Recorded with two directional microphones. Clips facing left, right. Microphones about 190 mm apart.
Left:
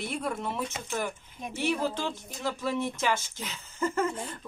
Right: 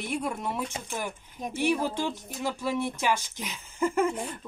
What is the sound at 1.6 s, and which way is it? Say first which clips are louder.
Speech: right 2 dB; 10° right (ahead or behind).